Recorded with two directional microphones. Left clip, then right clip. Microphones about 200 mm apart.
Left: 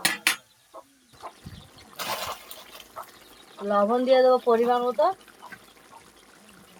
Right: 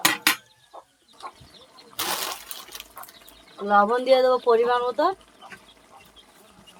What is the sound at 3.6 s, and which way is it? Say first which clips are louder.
Speech: right 3 dB; 45° right (ahead or behind).